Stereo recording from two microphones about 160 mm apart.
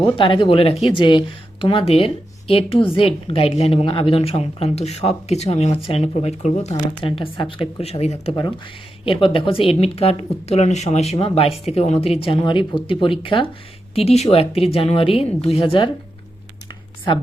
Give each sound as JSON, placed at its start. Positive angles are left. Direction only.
{"t": 0.0, "sound": "a woman's voice", "side_deg": 30}